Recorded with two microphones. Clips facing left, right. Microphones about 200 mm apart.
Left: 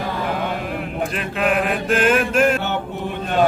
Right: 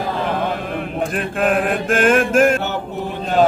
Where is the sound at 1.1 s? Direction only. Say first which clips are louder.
Right 2 dB; 45° right (ahead or behind).